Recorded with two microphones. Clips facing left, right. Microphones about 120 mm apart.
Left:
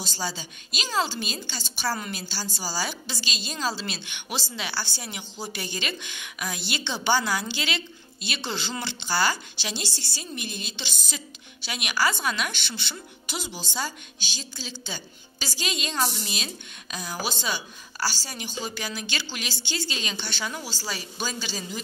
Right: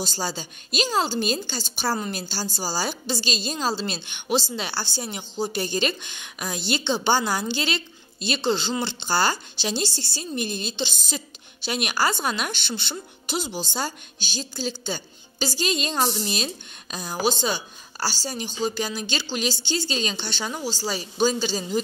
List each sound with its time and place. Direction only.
0.0 s a woman's voice: 40° right (ahead or behind)
16.9 s a woman's voice: 25° right (ahead or behind)